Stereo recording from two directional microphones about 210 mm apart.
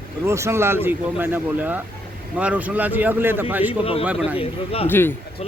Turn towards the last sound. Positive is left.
turn(degrees=10)  # may be behind; listen again after turning